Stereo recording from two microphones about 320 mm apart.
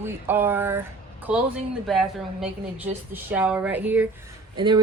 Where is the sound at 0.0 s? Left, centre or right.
Centre.